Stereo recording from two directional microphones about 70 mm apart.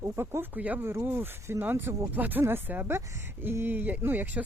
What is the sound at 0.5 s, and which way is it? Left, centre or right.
Speech, right.